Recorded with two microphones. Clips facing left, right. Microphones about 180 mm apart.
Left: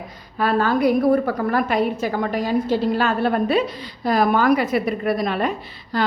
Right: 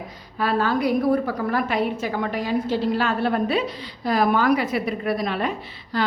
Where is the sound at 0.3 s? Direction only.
50° left (ahead or behind).